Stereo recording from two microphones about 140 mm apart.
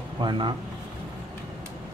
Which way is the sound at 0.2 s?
35° right (ahead or behind).